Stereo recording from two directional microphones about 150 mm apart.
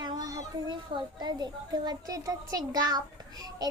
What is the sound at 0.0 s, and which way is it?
A child's voice, 30° right (ahead or behind).